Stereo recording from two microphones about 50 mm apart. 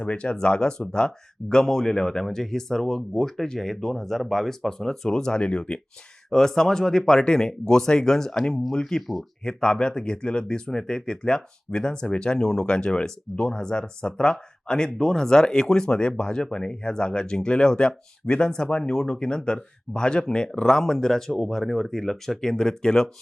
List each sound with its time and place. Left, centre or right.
0.0 s speech: left; by 9.2 s centre
9.4 s speech: centre